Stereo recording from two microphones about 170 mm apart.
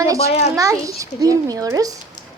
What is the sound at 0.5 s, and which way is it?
A child's voice, 20° right (ahead or behind).